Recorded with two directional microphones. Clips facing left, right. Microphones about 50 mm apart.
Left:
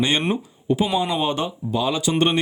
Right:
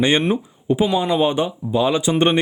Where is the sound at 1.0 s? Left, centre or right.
Centre.